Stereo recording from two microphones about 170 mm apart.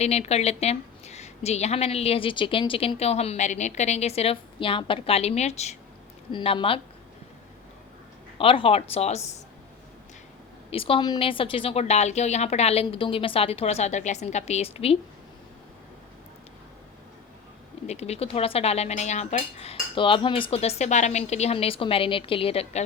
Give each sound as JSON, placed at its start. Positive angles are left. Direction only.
{"t": 0.0, "sound": "a woman's voice", "side_deg": 40}
{"t": 8.4, "sound": "a woman's voice", "side_deg": 30}
{"t": 10.7, "sound": "a woman's voice", "side_deg": 35}
{"t": 17.8, "sound": "a woman's voice", "side_deg": 40}